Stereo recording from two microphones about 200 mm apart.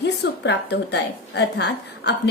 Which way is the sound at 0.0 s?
60° left (ahead or behind).